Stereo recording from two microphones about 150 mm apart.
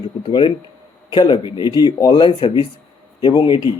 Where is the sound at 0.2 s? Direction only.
30° left (ahead or behind).